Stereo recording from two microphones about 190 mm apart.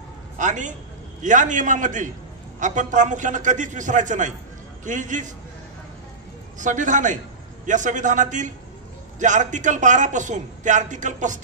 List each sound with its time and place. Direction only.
0.4 s a man's voice: 40° right (ahead or behind)
6.6 s a man's voice: 40° right (ahead or behind)